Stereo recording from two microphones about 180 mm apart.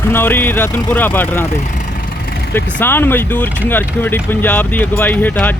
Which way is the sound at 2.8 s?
10° left (ahead or behind).